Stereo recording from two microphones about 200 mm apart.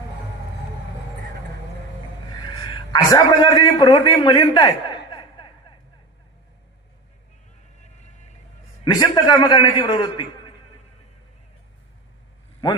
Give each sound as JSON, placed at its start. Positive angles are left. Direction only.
{"t": 2.9, "sound": "a man's voice", "side_deg": 20}
{"t": 8.8, "sound": "a man's voice", "side_deg": 20}